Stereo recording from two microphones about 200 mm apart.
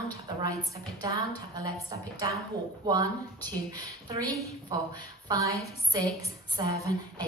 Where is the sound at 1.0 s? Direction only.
20° right (ahead or behind).